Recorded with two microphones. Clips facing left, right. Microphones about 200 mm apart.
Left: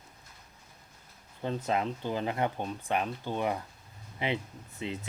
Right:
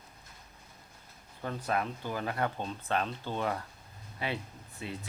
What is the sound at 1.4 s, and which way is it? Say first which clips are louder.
Speech: left 2 dB; 20° left (ahead or behind).